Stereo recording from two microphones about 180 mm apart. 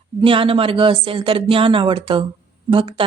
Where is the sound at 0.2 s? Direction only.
30° right (ahead or behind).